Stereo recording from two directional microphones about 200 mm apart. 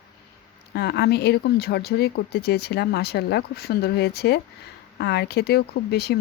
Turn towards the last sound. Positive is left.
turn(degrees=55)  # may be behind; listen again after turning